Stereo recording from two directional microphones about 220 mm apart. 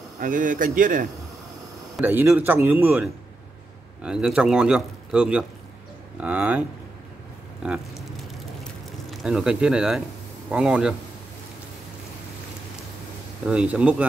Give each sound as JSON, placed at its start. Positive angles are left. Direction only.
{"t": 0.2, "sound": "speech", "side_deg": -35}
{"t": 2.0, "sound": "a man's voice", "side_deg": -10}
{"t": 7.6, "sound": "a man's voice", "side_deg": -5}
{"t": 9.1, "sound": "a man's voice", "side_deg": -5}
{"t": 13.5, "sound": "a man's voice", "side_deg": -5}